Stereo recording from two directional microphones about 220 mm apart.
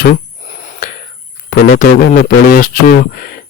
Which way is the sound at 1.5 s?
40° left (ahead or behind).